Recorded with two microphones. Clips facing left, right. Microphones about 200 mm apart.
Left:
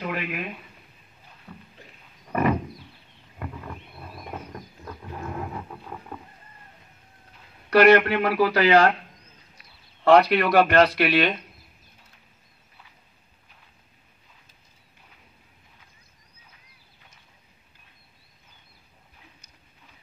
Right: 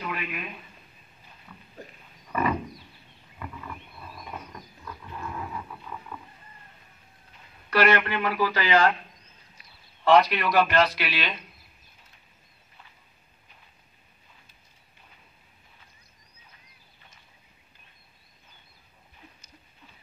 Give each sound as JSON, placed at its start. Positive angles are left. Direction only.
{"t": 0.0, "sound": "speech", "side_deg": 50}
{"t": 1.5, "sound": "speech", "side_deg": 45}
{"t": 3.3, "sound": "wild animals", "side_deg": 50}
{"t": 7.7, "sound": "speech", "side_deg": 55}
{"t": 10.0, "sound": "speech", "side_deg": 60}